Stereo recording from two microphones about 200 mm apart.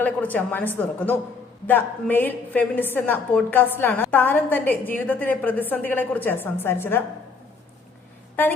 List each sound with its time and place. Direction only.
0.0 s a woman's voice: 10° left (ahead or behind)